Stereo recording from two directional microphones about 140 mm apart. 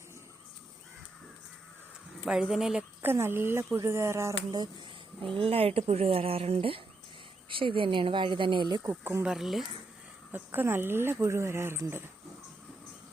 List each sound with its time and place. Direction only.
2.2 s speech: 5° right (ahead or behind)
3.0 s speech: 15° right (ahead or behind)
5.3 s speech: 40° right (ahead or behind)
8.9 s speech: 15° right (ahead or behind)
9.2 s speech: 5° right (ahead or behind)
10.3 s speech: 15° right (ahead or behind)